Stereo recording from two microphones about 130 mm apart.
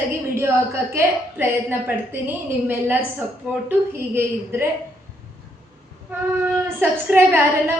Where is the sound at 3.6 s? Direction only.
20° right (ahead or behind).